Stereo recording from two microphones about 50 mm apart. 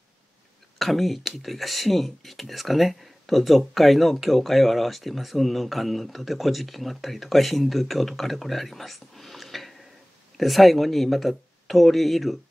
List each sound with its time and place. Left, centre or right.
0.7 s speech: centre